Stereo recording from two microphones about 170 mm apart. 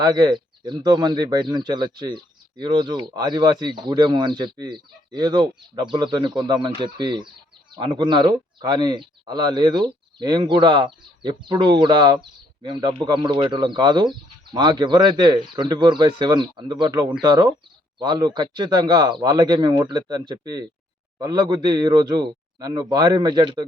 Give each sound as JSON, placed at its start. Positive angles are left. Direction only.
{"t": 0.0, "sound": "speech", "side_deg": -25}